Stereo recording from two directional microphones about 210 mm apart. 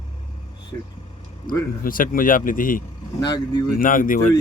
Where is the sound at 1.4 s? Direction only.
40° left (ahead or behind).